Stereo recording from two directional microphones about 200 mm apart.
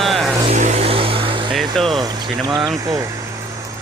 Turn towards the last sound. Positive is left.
turn(degrees=-15)  # may be behind; listen again after turning